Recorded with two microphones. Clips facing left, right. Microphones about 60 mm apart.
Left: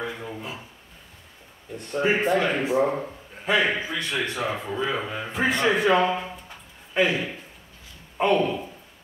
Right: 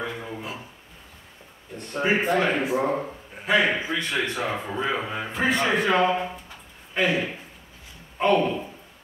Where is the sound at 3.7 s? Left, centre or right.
Centre.